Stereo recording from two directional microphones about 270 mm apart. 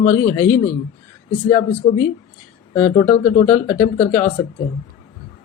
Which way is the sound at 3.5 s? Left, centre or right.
Centre.